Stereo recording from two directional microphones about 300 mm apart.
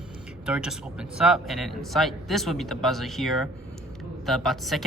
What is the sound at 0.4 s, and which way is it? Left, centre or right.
Speech, centre.